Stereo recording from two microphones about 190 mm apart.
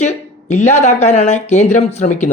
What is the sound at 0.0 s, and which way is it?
Speech, 40° left (ahead or behind).